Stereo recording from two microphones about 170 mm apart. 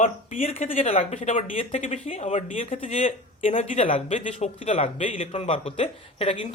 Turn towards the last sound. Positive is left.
turn(degrees=35)  # may be behind; listen again after turning